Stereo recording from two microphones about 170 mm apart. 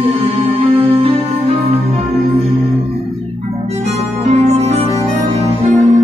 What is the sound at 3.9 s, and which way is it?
Music, 40° right (ahead or behind).